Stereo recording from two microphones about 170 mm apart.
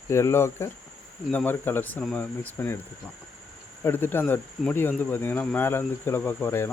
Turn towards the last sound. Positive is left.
turn(degrees=15)  # may be behind; listen again after turning